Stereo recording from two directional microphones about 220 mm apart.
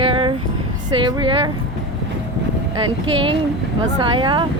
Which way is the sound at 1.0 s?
20° right (ahead or behind).